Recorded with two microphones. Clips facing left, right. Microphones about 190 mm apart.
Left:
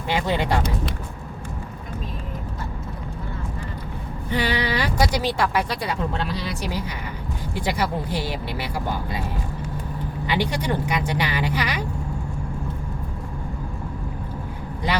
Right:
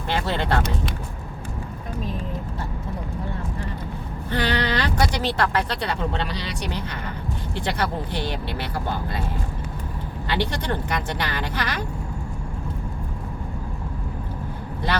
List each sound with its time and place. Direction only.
0.1 s a sound: 10° left (ahead or behind)
4.3 s music: 10° left (ahead or behind)
6.1 s speech: 5° left (ahead or behind)
10.2 s speech: 10° left (ahead or behind)